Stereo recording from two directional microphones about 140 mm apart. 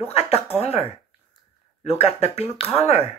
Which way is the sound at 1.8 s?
50° left (ahead or behind).